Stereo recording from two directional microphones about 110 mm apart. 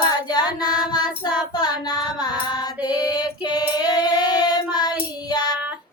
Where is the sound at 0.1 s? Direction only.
40° left (ahead or behind).